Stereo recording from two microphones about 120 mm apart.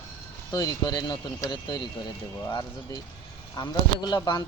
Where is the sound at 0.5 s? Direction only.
35° left (ahead or behind).